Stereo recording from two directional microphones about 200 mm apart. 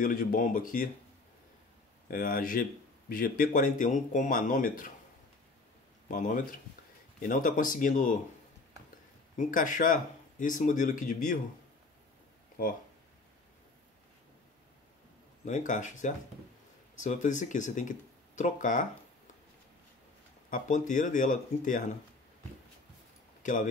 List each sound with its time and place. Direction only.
0.0 s speech: 45° left (ahead or behind)
2.0 s speech: 45° left (ahead or behind)
6.0 s speech: 40° left (ahead or behind)
9.4 s speech: 40° left (ahead or behind)
12.6 s speech: 45° left (ahead or behind)
15.4 s speech: 40° left (ahead or behind)
20.4 s speech: 40° left (ahead or behind)
23.4 s speech: 40° left (ahead or behind)